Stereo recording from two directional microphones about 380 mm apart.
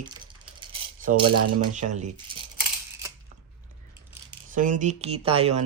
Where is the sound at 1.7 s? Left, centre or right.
Centre.